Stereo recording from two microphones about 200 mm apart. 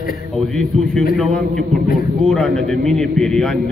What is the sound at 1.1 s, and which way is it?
A man's voice, centre (ahead or behind).